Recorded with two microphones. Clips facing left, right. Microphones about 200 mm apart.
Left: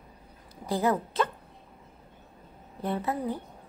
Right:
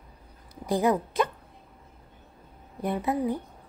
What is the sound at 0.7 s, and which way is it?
Speech, 15° right (ahead or behind).